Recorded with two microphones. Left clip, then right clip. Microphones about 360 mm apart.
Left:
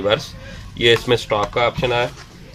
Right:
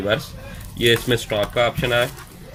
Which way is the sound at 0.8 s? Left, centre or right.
Centre.